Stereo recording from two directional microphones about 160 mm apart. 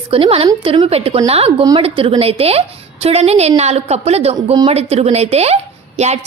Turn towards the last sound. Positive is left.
turn(degrees=-45)  # may be behind; listen again after turning